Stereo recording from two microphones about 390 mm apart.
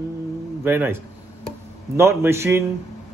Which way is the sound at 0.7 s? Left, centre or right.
Centre.